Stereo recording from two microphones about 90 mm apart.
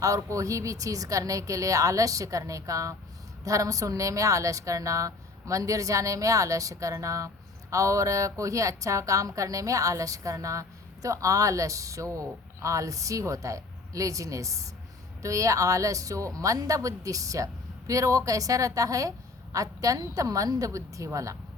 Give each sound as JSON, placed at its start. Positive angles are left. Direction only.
{"t": 0.0, "sound": "a woman's voice", "side_deg": -35}